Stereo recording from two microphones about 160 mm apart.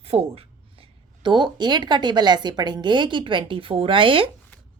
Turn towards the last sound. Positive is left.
turn(degrees=-35)  # may be behind; listen again after turning